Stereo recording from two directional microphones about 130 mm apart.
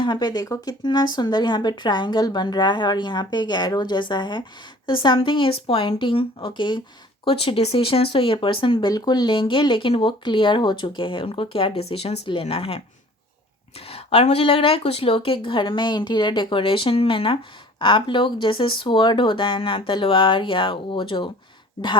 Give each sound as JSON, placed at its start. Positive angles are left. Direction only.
{"t": 0.0, "sound": "speech", "side_deg": 35}
{"t": 8.9, "sound": "speech", "side_deg": 30}